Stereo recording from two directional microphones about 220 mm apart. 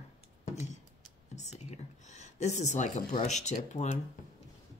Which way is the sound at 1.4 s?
30° left (ahead or behind).